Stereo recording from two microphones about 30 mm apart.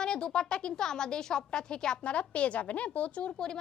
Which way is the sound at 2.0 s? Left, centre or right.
Left.